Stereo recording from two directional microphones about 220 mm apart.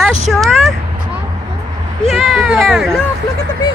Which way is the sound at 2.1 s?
Centre (ahead or behind).